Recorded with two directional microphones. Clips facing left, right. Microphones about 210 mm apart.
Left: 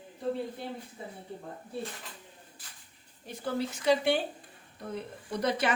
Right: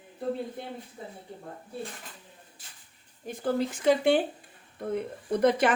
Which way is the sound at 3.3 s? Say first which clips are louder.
Right 5 dB; 50° right (ahead or behind).